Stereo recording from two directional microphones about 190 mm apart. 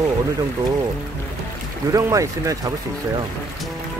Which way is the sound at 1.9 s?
15° right (ahead or behind).